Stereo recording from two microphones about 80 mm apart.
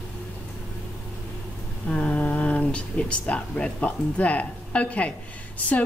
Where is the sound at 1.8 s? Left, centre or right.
Centre.